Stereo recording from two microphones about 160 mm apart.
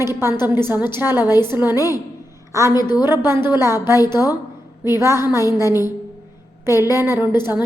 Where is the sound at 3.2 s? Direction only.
15° right (ahead or behind).